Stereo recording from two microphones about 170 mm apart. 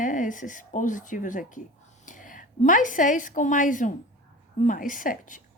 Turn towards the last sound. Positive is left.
turn(degrees=50)  # may be behind; listen again after turning